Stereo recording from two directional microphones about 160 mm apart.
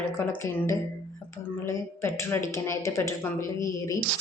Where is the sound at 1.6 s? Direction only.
15° left (ahead or behind).